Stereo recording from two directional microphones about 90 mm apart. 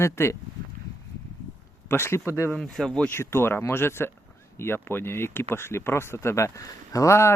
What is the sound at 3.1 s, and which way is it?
Speech, 25° left (ahead or behind).